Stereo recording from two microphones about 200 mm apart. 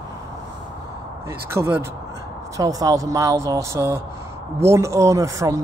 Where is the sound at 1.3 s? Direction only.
10° right (ahead or behind).